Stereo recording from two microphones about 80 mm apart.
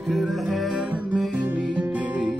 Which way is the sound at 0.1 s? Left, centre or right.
Centre.